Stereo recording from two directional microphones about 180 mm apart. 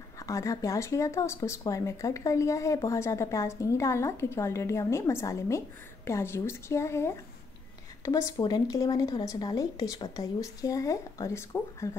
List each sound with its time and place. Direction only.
0.2 s a woman's voice: 15° left (ahead or behind)